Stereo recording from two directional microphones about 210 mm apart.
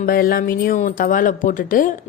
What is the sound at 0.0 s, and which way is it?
Speech, 45° left (ahead or behind).